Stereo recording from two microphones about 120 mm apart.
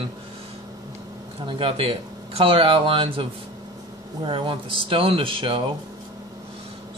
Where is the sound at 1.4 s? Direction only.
45° right (ahead or behind).